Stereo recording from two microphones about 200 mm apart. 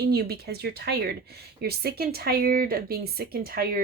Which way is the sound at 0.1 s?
55° right (ahead or behind).